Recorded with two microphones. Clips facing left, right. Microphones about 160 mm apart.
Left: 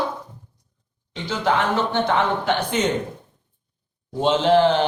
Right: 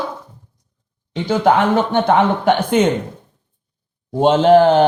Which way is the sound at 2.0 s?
55° right (ahead or behind).